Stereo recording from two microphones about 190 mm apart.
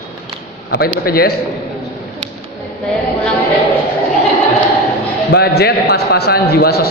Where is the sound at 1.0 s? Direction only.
50° left (ahead or behind).